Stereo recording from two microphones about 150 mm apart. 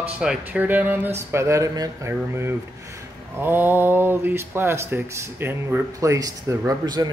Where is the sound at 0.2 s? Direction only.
5° right (ahead or behind).